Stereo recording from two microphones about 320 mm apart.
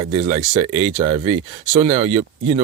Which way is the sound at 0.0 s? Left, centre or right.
Centre.